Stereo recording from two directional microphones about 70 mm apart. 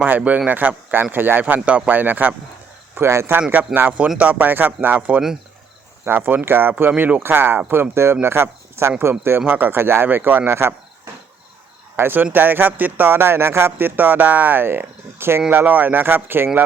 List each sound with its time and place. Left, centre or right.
0.3 s speech: right
2.9 s speech: right
3.8 s speech: right
6.9 s speech: right
7.2 s speech: right